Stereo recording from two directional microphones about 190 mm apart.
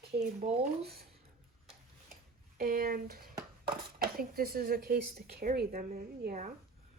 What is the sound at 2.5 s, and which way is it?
Speech, 50° right (ahead or behind).